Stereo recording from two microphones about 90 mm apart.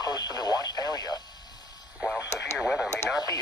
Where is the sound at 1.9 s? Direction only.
5° right (ahead or behind).